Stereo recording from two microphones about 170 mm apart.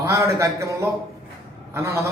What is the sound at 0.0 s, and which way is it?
A man's voice, 15° right (ahead or behind).